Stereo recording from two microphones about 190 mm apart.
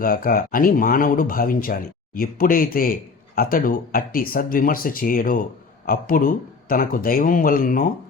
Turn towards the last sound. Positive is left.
turn(degrees=45)  # may be behind; listen again after turning